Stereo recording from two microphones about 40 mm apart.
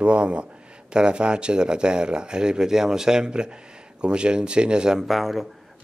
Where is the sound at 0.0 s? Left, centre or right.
Right.